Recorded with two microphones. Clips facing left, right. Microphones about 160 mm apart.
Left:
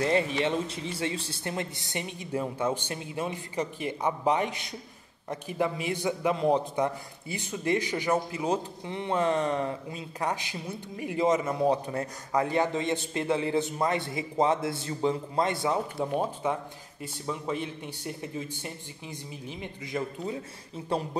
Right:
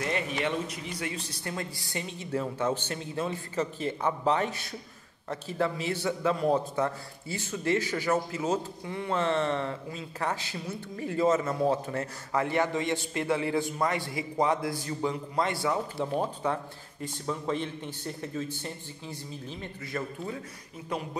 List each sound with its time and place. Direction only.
0.0 s a man's voice: 30° left (ahead or behind)
16.0 s a man's voice: 10° left (ahead or behind)
20.9 s speech: 30° left (ahead or behind)